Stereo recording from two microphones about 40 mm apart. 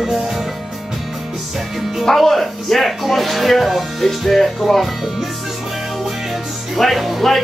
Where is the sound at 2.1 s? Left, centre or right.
Centre.